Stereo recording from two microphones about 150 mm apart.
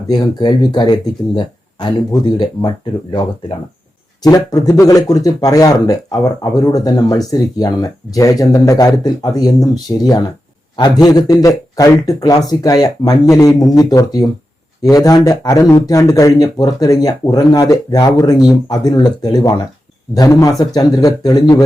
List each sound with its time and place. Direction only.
0.1 s speech: 30° left (ahead or behind)
4.2 s speech: 25° left (ahead or behind)